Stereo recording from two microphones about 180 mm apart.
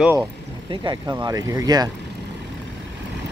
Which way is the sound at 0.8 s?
20° right (ahead or behind).